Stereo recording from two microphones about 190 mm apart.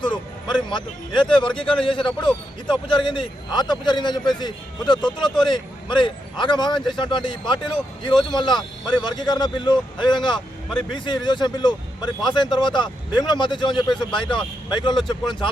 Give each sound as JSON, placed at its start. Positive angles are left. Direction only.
{"t": 0.0, "sound": "speech", "side_deg": 25}
{"t": 14.9, "sound": "speech", "side_deg": 0}